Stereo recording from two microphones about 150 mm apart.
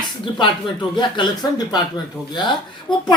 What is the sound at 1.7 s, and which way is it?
Speech, 30° left (ahead or behind).